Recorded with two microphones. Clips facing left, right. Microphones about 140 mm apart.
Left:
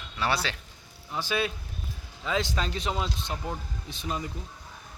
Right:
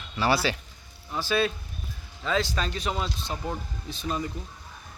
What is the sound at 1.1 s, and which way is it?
Speech, 15° left (ahead or behind).